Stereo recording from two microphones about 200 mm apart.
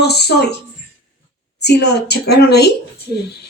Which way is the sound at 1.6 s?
55° left (ahead or behind).